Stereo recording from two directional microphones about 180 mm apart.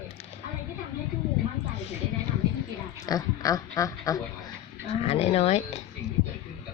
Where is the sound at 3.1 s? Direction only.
20° left (ahead or behind).